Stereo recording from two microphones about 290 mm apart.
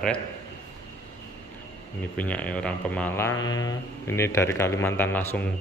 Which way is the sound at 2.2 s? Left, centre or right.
Centre.